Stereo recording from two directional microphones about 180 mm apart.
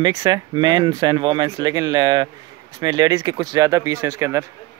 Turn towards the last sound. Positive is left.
turn(degrees=-15)  # may be behind; listen again after turning